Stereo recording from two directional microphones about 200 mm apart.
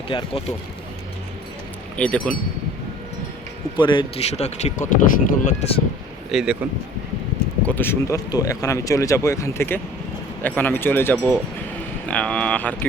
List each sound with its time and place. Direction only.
0.1 s speech: 25° left (ahead or behind)
2.0 s speech: 5° left (ahead or behind)
3.8 s speech: 25° left (ahead or behind)
6.3 s speech: 5° right (ahead or behind)
7.7 s speech: 10° left (ahead or behind)